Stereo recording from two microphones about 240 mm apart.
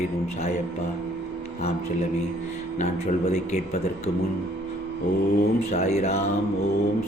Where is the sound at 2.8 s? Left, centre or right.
Left.